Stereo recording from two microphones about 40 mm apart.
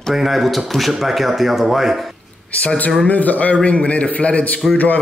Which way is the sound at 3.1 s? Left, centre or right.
Left.